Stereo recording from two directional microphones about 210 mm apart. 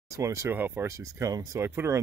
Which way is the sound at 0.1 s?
15° right (ahead or behind).